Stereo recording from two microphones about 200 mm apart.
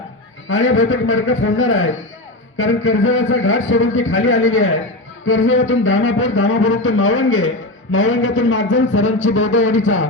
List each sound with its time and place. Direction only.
0.4 s speech: 75° left (ahead or behind)